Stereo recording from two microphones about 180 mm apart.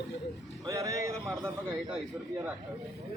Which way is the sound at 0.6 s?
20° right (ahead or behind).